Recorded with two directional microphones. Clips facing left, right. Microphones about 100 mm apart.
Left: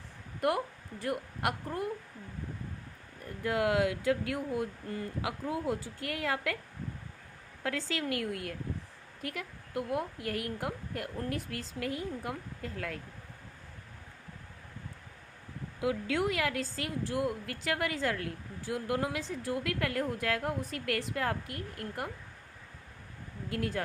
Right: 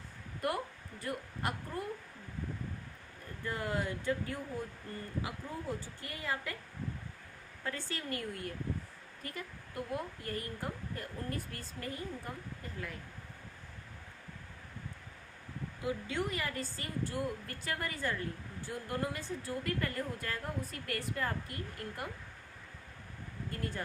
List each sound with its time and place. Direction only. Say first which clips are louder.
0.4 s a woman's voice: left 5 dB; 65° left (ahead or behind)
3.4 s speech: left 8 dB; 90° left
4.5 s speech: left 7 dB; 75° left (ahead or behind); by 6.6 s 90° left
7.6 s speech: left 6 dB; 85° left; by 11.6 s 70° left (ahead or behind)
11.8 s speech: left 5 dB; 85° left
15.8 s speech: left 6 dB; 90° left
17.2 s speech: left 5 dB; 70° left (ahead or behind); by 18.3 s 90° left
18.7 s speech: left 5 dB; 70° left (ahead or behind)
23.5 s speech: left 7 dB; 85° left